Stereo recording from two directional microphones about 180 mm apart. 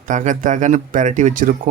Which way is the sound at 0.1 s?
45° right (ahead or behind).